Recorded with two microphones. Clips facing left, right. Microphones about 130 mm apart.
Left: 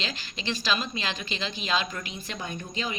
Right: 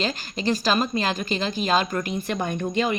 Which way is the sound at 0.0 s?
45° right (ahead or behind).